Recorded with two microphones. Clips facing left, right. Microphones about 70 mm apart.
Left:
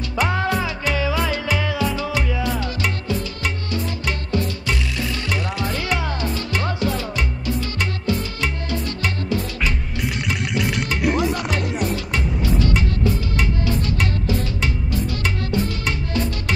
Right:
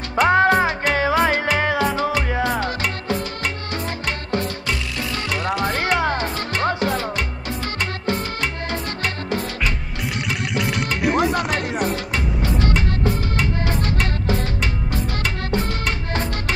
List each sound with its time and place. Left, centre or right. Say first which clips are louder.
0.1 s music: right 7 dB; right
5.4 s music: right 4 dB; right
10.2 s vehicle: even; centre
11.0 s music: right 1 dB; centre
11.3 s music: right 2 dB; right
15.5 s music: right 1 dB; right